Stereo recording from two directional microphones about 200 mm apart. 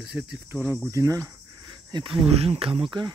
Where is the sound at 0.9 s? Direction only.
15° right (ahead or behind).